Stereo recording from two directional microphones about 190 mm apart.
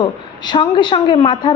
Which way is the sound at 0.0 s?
25° left (ahead or behind).